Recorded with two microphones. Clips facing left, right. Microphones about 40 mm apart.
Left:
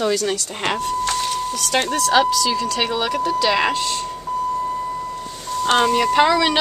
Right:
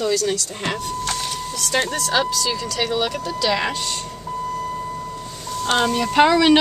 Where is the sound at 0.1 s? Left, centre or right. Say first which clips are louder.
Even; left.